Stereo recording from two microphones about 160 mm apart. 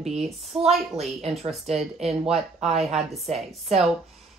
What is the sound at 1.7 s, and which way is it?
Speech, 40° right (ahead or behind).